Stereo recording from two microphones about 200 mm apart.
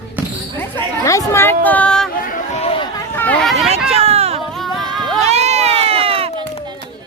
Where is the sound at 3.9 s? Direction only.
30° right (ahead or behind).